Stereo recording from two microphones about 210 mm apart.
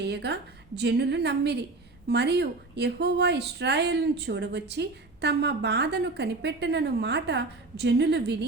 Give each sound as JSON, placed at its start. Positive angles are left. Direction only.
{"t": 0.0, "sound": "a woman's voice", "side_deg": -55}